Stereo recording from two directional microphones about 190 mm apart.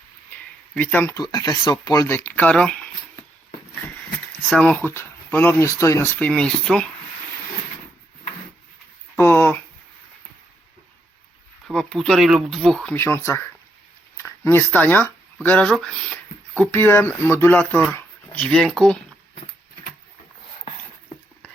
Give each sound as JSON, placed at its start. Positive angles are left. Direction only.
{"t": 0.7, "sound": "speech", "side_deg": 10}
{"t": 1.1, "sound": "speech", "side_deg": 20}
{"t": 4.4, "sound": "speech", "side_deg": 5}
{"t": 9.1, "sound": "speech", "side_deg": 10}
{"t": 11.7, "sound": "speech", "side_deg": 5}